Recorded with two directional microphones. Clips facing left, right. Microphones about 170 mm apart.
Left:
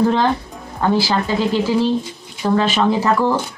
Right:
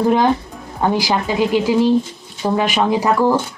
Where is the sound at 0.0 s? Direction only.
15° right (ahead or behind).